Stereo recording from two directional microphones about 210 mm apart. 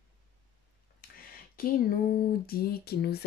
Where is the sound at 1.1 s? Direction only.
45° left (ahead or behind).